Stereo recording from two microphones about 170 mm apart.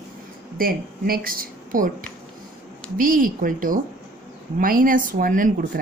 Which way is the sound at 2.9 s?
55° right (ahead or behind).